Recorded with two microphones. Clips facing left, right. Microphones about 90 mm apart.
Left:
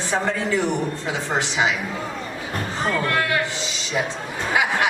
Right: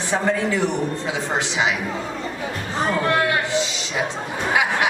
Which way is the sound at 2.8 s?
20° right (ahead or behind).